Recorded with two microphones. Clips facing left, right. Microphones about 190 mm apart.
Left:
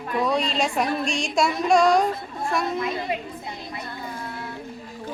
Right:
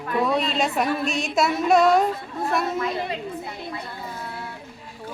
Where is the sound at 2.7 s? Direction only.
20° left (ahead or behind).